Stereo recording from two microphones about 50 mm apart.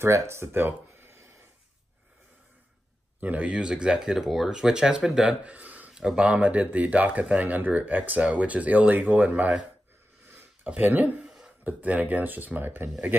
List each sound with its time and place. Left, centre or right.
0.0 s speech: right
3.2 s speech: right; by 5.3 s centre
5.4 s a sound: right
6.1 s speech: right
10.7 s speech: right
11.1 s throat clearing: centre
11.6 s speech: right